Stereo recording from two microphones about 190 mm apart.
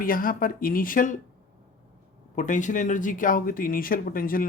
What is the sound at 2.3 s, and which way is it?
A man's voice, 40° left (ahead or behind).